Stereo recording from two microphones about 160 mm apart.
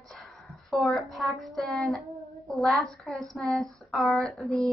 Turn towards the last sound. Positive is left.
turn(degrees=0)  # may be behind; listen again after turning